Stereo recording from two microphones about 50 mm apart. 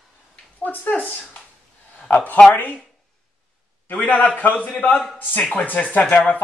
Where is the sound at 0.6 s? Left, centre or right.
Left.